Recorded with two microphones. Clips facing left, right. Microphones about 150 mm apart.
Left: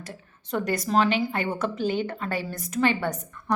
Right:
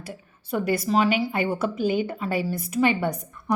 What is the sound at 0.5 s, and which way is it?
A woman's voice, 10° right (ahead or behind).